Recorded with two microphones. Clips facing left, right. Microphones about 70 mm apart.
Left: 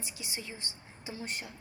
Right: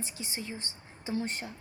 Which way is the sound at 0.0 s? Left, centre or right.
Right.